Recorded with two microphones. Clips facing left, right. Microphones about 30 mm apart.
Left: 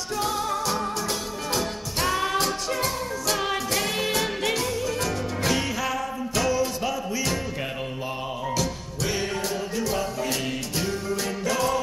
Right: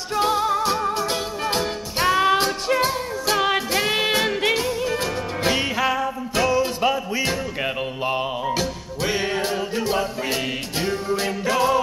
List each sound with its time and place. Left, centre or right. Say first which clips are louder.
0.1 s music: right 7 dB; right